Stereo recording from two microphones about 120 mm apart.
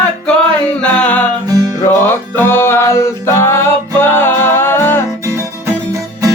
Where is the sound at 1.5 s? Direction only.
30° right (ahead or behind).